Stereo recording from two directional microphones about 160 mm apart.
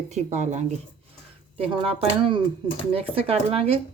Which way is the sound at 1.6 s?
35° right (ahead or behind).